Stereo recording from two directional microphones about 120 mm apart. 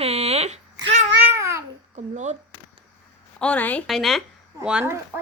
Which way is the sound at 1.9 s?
80° right.